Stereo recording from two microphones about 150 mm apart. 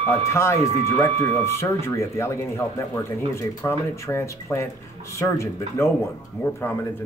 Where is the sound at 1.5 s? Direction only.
20° left (ahead or behind).